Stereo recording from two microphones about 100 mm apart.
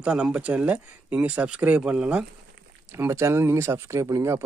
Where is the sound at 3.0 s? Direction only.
30° right (ahead or behind).